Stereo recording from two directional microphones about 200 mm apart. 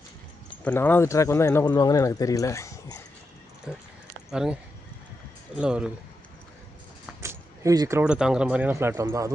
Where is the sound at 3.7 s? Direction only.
5° right (ahead or behind).